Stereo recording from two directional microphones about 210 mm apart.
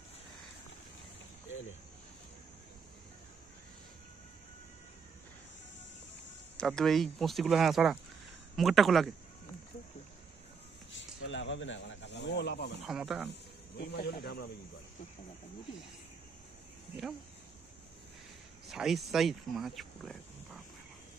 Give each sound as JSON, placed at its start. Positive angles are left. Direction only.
{"t": 6.5, "sound": "speech", "side_deg": 5}
{"t": 10.9, "sound": "snake", "side_deg": 60}
{"t": 12.8, "sound": "speech", "side_deg": 0}
{"t": 13.3, "sound": "snake", "side_deg": 50}
{"t": 14.2, "sound": "speech", "side_deg": 50}
{"t": 18.7, "sound": "speech", "side_deg": 0}